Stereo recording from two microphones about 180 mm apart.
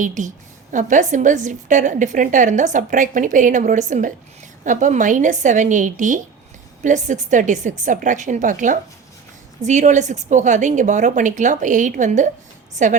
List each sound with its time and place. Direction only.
0.0 s a woman's voice: 45° right (ahead or behind)